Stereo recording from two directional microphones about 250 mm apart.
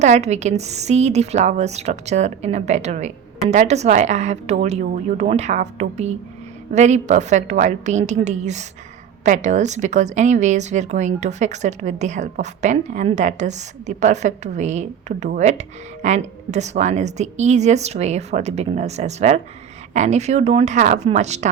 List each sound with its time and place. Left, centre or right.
0.0 s speech: right